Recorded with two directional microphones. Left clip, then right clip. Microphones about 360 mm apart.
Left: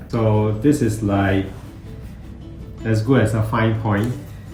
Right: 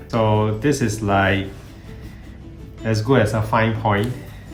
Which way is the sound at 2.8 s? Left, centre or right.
Centre.